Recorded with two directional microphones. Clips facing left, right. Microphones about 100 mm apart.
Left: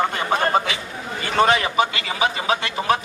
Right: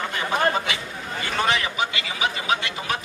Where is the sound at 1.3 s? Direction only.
40° left (ahead or behind).